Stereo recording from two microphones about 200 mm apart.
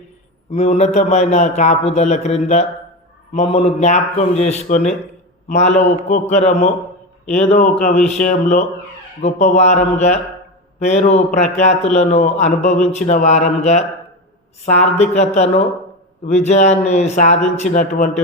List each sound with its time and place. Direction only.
0.5 s speech: 35° left (ahead or behind)